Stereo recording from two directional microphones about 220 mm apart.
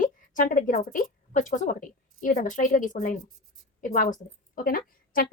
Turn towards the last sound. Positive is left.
turn(degrees=40)  # may be behind; listen again after turning